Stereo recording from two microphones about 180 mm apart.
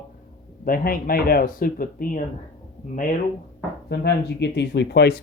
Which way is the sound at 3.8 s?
70° left (ahead or behind).